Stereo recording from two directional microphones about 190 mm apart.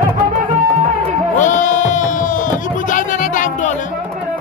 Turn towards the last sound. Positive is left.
turn(degrees=45)  # may be behind; listen again after turning